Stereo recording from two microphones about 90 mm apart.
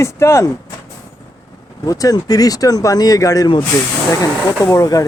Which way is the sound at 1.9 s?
40° left (ahead or behind).